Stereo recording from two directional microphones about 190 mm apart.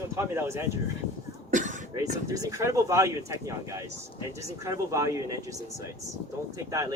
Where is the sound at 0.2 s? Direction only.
15° right (ahead or behind).